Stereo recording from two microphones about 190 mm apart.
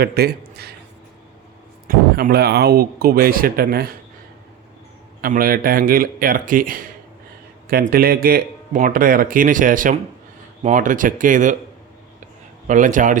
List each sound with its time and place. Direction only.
0.0 s a man's voice: 55° right (ahead or behind)
1.9 s speech: 50° right (ahead or behind)
5.2 s speech: 50° right (ahead or behind)
12.6 s speech: 40° right (ahead or behind)